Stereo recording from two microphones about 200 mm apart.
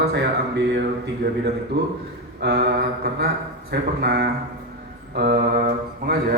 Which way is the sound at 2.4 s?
55° right (ahead or behind).